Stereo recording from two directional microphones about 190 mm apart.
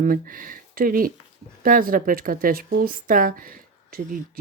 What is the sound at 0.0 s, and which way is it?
Speech, 45° right (ahead or behind).